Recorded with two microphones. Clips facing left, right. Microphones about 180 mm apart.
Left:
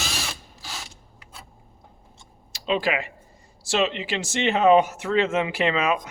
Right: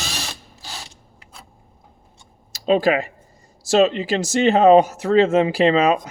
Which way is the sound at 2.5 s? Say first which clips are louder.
Right 7 dB; 45° right (ahead or behind).